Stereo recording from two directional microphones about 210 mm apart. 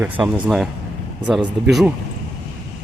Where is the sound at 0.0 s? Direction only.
5° right (ahead or behind).